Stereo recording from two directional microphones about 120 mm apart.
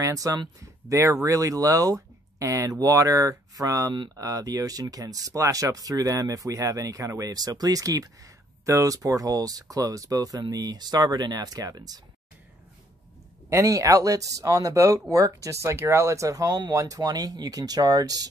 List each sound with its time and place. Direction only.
0.0 s speech: 30° right (ahead or behind)
13.5 s speech: 25° right (ahead or behind)